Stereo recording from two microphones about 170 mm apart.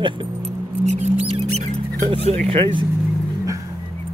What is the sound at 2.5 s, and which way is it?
Speech, 30° right (ahead or behind).